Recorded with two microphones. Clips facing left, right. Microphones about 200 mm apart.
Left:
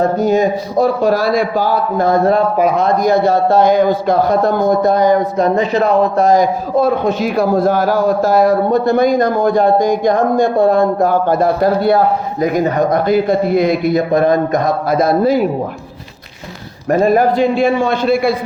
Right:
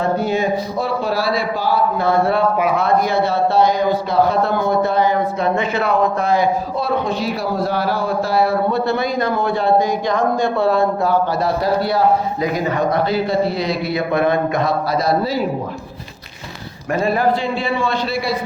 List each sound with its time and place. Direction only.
0.0 s a man's voice: 45° left (ahead or behind)
16.9 s a man's voice: 45° left (ahead or behind)